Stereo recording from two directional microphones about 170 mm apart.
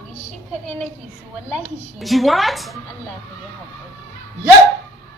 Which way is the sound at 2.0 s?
Centre (ahead or behind).